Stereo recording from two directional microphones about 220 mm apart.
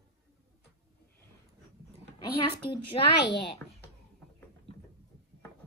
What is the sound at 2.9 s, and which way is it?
Speech, 25° left (ahead or behind).